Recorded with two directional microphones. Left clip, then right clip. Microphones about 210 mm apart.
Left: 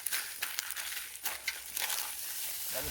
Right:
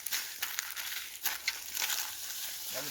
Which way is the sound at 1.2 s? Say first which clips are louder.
Right 3 dB; 20° right (ahead or behind).